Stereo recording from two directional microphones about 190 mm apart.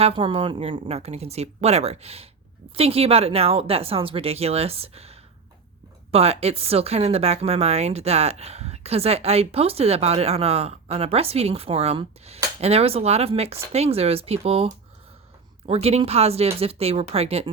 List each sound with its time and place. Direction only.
0.0 s speech: 30° right (ahead or behind)